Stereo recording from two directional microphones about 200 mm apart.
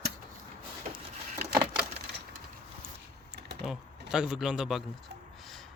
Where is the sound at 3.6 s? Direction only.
5° right (ahead or behind).